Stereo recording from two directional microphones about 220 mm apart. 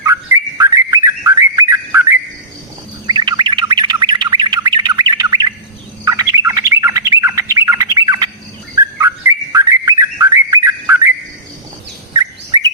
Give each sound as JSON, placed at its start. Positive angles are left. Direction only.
{"t": 0.0, "sound": "bird", "side_deg": -15}